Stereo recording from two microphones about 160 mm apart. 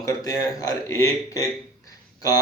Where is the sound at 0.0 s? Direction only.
20° left (ahead or behind).